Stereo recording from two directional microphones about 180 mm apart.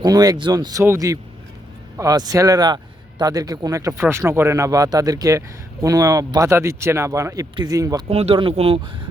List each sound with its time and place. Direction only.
0.0 s speech: 20° right (ahead or behind)
8.1 s speech: 35° right (ahead or behind)